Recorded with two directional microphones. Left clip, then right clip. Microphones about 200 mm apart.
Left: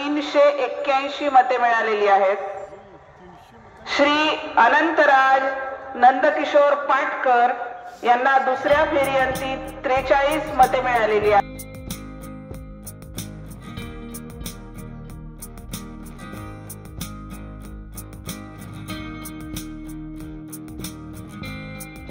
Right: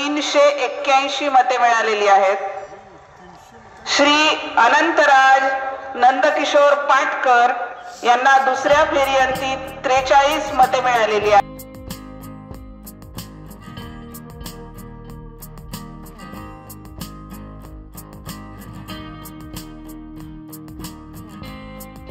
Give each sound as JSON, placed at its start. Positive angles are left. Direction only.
{"t": 0.0, "sound": "a woman's voice", "side_deg": -25}
{"t": 3.8, "sound": "a woman's voice", "side_deg": -30}